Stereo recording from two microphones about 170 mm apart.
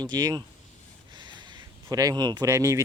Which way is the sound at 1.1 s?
25° right (ahead or behind).